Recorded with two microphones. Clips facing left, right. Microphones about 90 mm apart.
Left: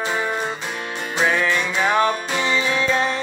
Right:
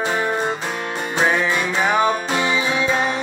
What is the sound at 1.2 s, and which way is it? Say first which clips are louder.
Music: even; 20° right (ahead or behind).